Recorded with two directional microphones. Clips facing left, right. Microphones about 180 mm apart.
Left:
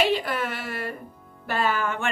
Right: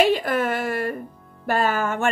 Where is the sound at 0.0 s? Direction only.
45° right (ahead or behind).